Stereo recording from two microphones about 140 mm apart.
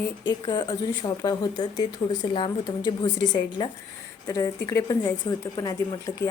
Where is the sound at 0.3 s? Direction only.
30° left (ahead or behind).